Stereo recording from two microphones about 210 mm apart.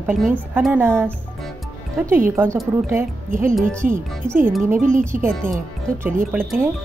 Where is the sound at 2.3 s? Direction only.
10° right (ahead or behind).